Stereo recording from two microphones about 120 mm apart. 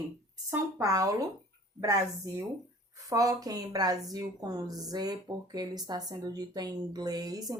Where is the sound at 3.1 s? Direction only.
30° right (ahead or behind).